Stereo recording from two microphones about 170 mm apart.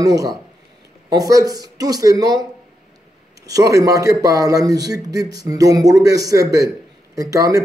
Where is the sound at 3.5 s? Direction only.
20° right (ahead or behind).